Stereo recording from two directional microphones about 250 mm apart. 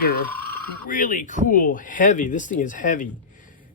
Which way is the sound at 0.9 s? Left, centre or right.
Left.